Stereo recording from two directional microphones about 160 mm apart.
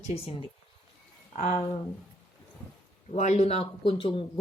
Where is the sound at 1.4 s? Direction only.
50° left (ahead or behind).